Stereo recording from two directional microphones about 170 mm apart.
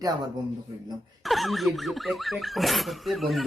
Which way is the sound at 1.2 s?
Centre (ahead or behind).